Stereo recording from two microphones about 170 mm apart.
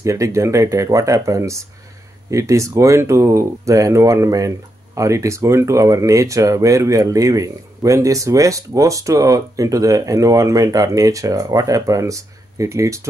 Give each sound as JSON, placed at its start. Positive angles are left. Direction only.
{"t": 0.0, "sound": "speech", "side_deg": -20}